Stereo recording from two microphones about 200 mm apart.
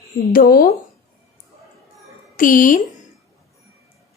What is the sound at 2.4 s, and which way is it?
Speech, 40° left (ahead or behind).